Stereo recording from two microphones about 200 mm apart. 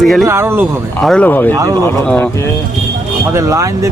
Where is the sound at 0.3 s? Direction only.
10° right (ahead or behind).